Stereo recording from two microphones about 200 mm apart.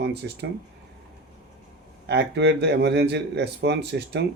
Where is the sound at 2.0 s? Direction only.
60° right (ahead or behind).